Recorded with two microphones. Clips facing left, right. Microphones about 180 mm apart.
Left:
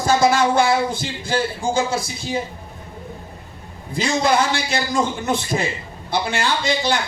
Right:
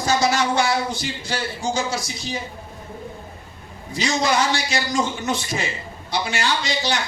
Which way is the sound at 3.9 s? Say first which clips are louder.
Left 3 dB; 55° left (ahead or behind).